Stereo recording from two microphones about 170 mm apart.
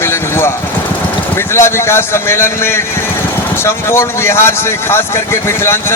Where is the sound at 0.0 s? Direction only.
15° left (ahead or behind).